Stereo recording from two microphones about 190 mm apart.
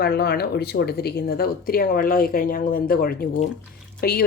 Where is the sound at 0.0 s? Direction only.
55° left (ahead or behind).